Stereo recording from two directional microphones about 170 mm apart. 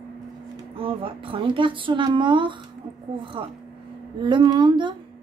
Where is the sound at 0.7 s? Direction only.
35° right (ahead or behind).